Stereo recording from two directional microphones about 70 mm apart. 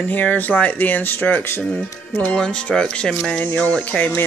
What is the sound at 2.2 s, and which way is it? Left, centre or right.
Speech, centre.